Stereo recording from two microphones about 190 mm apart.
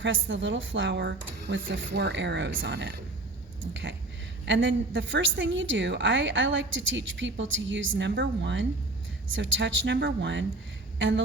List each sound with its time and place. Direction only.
0.0 s a woman's voice: 80° right
4.4 s a woman's voice: 75° right (ahead or behind)
9.3 s a woman's voice: 80° right